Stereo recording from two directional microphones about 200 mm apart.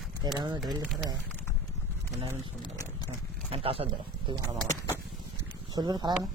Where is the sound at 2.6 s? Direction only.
20° left (ahead or behind).